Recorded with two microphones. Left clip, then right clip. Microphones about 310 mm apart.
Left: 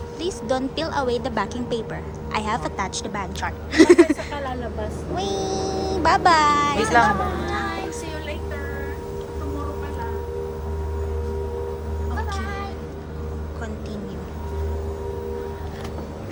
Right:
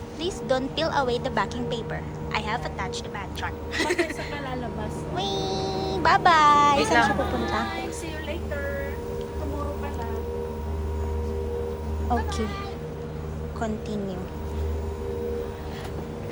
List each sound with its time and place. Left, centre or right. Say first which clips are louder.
0.3 s a woman's voice: left 1 dB; centre
6.7 s speech: left 3 dB; left